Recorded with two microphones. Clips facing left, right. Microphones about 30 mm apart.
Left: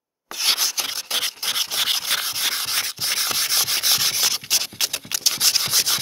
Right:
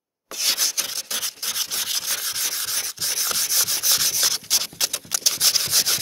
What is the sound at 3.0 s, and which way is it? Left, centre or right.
Sanding, left.